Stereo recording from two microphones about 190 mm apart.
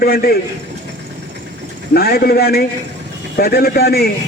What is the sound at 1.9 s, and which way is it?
A man's voice, 55° left (ahead or behind).